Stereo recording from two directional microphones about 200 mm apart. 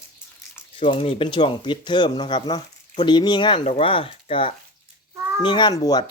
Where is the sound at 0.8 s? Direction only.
30° left (ahead or behind).